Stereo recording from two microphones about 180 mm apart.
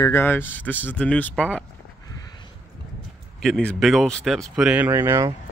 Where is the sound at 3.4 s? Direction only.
5° left (ahead or behind); by 5.3 s 15° right (ahead or behind).